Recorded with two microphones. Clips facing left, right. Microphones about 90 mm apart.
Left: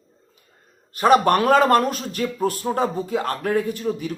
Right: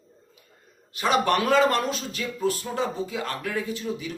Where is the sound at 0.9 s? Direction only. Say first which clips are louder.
Left 7 dB; 45° left (ahead or behind).